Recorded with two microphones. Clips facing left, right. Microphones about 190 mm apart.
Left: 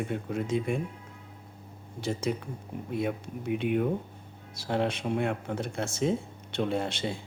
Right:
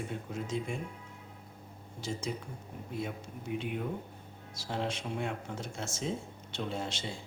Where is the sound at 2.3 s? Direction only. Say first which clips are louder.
Left 7 dB; 65° left (ahead or behind).